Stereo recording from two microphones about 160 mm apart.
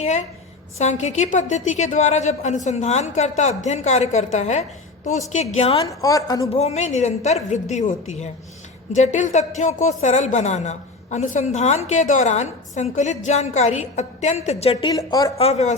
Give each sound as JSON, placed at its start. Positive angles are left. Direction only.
{"t": 0.8, "sound": "a woman's voice", "side_deg": 45}
{"t": 5.8, "sound": "speech", "side_deg": 20}
{"t": 6.5, "sound": "a woman's voice", "side_deg": 45}
{"t": 14.9, "sound": "speech", "side_deg": 20}
{"t": 15.4, "sound": "a woman's voice", "side_deg": 40}